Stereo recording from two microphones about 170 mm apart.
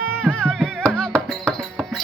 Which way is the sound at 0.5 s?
5° left (ahead or behind).